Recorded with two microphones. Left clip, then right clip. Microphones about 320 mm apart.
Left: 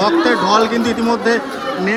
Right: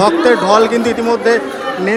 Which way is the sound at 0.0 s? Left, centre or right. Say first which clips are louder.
Right 3 dB; centre.